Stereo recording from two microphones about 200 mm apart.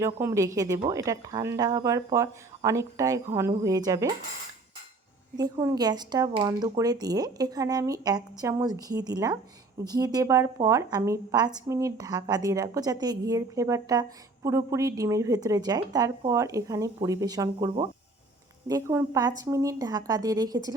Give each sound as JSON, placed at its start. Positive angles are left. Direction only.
{"t": 0.0, "sound": "a woman's voice", "side_deg": -15}
{"t": 5.4, "sound": "a woman's voice", "side_deg": -20}